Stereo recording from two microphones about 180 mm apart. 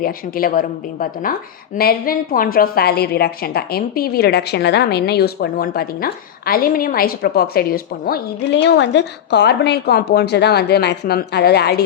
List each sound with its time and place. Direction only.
0.0 s a woman's voice: 50° left (ahead or behind)
8.6 s a woman's voice: 75° left (ahead or behind)